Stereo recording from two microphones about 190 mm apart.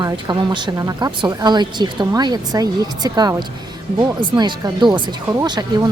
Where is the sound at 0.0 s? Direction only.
20° right (ahead or behind).